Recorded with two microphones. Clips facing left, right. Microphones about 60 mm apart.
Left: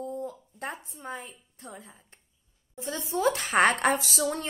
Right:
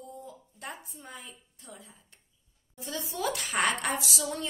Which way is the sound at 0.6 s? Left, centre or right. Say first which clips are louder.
Left 6 dB; left.